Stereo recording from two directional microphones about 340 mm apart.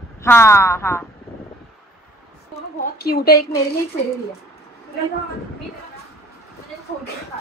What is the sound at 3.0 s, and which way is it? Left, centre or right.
Speech, left.